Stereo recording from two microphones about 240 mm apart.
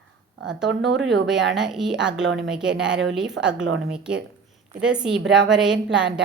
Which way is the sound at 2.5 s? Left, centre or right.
Centre.